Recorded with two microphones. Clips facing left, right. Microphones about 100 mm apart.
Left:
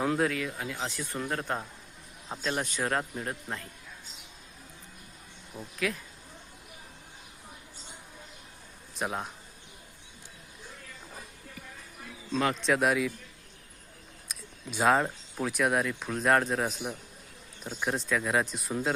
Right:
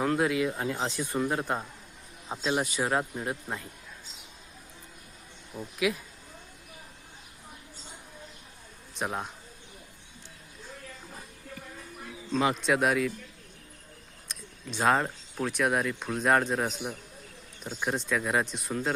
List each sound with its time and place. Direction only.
0.0 s speech: centre (ahead or behind)
0.4 s speech: 30° right (ahead or behind)
0.9 s speech: 15° right (ahead or behind)
5.5 s speech: 10° right (ahead or behind)
9.0 s speech: centre (ahead or behind)
12.5 s speech: centre (ahead or behind)
14.3 s speech: 5° left (ahead or behind)